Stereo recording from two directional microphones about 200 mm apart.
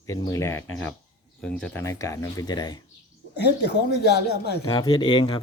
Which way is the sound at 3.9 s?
55° left (ahead or behind).